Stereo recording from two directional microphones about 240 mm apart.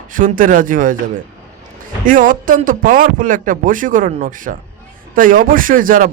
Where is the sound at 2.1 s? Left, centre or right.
Right.